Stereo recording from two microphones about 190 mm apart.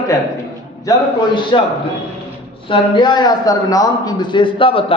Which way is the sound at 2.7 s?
25° left (ahead or behind).